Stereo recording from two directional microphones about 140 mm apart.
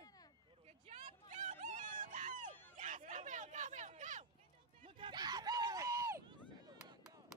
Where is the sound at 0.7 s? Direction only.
50° right (ahead or behind).